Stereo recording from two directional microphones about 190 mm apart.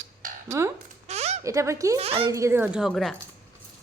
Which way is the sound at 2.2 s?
15° right (ahead or behind).